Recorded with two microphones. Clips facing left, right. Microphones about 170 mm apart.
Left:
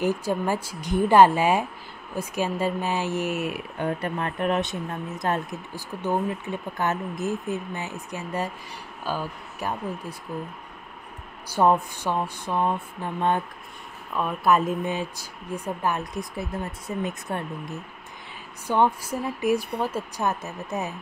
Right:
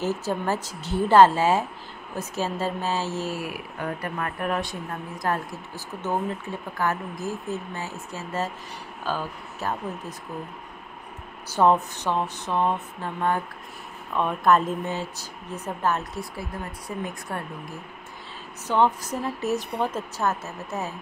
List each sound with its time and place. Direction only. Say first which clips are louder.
0.0 s speech: left 2 dB; 15° left (ahead or behind)
11.5 s speech: right 1 dB; 10° left (ahead or behind)
14.1 s speech: right 1 dB; 5° left (ahead or behind); by 17.7 s 20° left (ahead or behind)
18.7 s speech: even; 10° left (ahead or behind)